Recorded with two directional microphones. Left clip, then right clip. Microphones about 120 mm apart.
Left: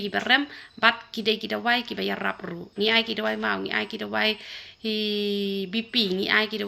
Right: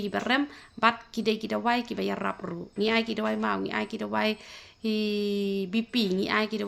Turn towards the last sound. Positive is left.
turn(degrees=-45)  # may be behind; listen again after turning